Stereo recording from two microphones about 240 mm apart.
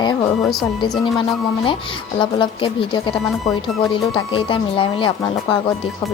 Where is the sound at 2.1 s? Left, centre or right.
Left.